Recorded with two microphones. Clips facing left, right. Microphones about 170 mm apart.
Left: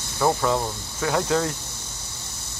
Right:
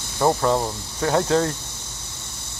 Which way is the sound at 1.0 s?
35° right (ahead or behind).